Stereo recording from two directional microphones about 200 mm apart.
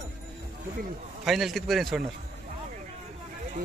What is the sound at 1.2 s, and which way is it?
Speech, centre (ahead or behind).